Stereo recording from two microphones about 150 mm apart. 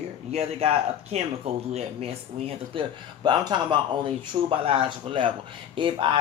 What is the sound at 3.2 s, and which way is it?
Speech, 30° right (ahead or behind).